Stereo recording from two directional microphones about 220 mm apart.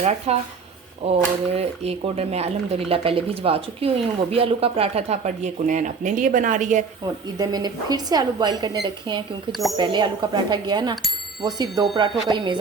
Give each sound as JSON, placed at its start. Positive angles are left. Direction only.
{"t": 0.3, "sound": "speech", "side_deg": -30}
{"t": 7.0, "sound": "speech", "side_deg": -20}
{"t": 9.5, "sound": "speech", "side_deg": 0}
{"t": 9.7, "sound": "speech", "side_deg": -20}
{"t": 10.9, "sound": "bicycle bell", "side_deg": 0}
{"t": 11.4, "sound": "speech", "side_deg": -20}